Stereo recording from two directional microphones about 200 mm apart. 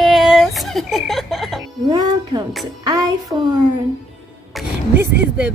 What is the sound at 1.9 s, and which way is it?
Music, 20° right (ahead or behind).